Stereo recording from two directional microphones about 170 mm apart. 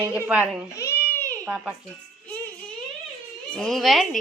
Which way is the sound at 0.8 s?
15° left (ahead or behind).